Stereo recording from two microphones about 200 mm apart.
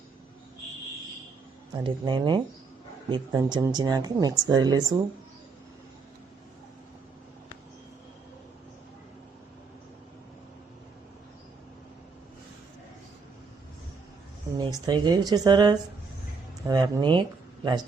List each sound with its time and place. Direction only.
1.7 s speech: 20° right (ahead or behind)
14.6 s speech: 20° right (ahead or behind)